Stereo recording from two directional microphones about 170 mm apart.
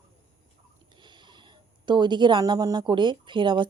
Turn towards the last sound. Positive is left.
turn(degrees=-30)  # may be behind; listen again after turning